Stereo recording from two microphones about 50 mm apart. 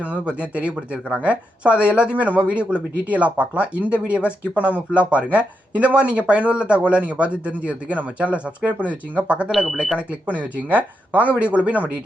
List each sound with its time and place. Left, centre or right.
0.0 s speech: right